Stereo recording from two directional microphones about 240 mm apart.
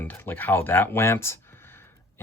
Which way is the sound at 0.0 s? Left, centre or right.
Centre.